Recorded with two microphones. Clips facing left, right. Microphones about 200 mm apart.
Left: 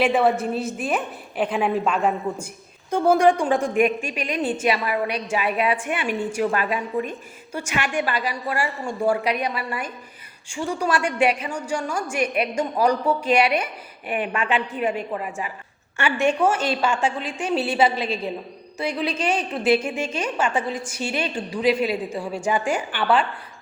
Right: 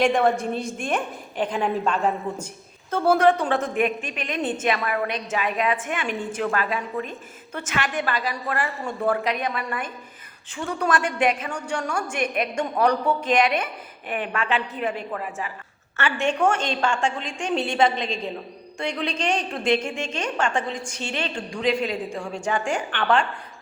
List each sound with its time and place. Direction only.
0.0 s a woman's voice: 5° left (ahead or behind)
8.4 s a woman's voice: centre (ahead or behind)